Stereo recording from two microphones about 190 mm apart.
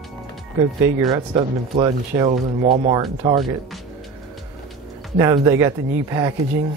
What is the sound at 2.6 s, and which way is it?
Speech, 35° right (ahead or behind).